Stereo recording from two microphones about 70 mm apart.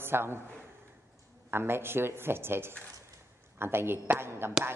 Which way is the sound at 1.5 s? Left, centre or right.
Right.